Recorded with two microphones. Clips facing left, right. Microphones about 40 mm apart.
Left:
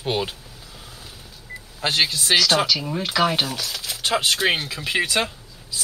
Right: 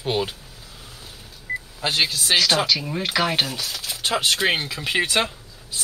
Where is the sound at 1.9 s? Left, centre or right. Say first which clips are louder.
Left 1 dB; centre.